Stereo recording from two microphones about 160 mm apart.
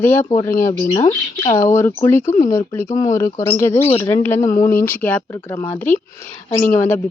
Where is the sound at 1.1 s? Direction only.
30° left (ahead or behind).